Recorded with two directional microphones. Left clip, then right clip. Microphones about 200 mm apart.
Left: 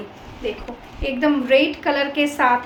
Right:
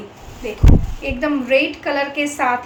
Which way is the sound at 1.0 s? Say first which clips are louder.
Left 3 dB; 15° left (ahead or behind).